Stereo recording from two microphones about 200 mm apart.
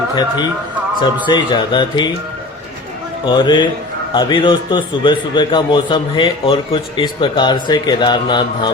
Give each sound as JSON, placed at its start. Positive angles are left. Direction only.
{"t": 1.3, "sound": "a man's voice", "side_deg": 25}
{"t": 3.2, "sound": "a man's voice", "side_deg": 20}